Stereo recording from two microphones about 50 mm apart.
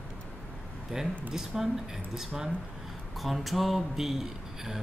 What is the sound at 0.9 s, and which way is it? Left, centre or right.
Speech, centre.